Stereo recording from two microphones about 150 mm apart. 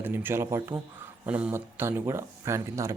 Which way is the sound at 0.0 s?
15° right (ahead or behind).